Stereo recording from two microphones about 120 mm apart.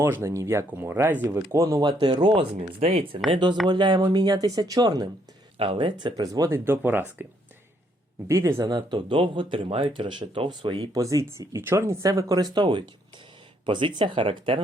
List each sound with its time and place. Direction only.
0.0 s speech: 25° right (ahead or behind)
1.8 s speech: 40° right (ahead or behind)
3.3 s speech: 40° right (ahead or behind)
5.5 s speech: 50° right (ahead or behind)
6.1 s speech: 30° right (ahead or behind)
6.7 s speech: 20° right (ahead or behind)
8.3 s speech: 25° right (ahead or behind); by 10.8 s 45° right (ahead or behind)
10.9 s speech: 30° right (ahead or behind); by 14.6 s 50° right (ahead or behind)